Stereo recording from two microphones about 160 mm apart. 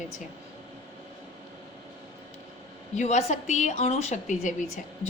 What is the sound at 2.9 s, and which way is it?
A woman's voice, 50° left (ahead or behind).